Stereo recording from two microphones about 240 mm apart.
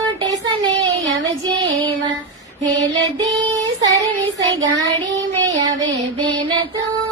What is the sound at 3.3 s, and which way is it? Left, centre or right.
Child singing, centre.